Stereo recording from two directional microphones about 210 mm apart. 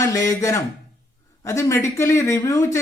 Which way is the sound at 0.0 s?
15° left (ahead or behind).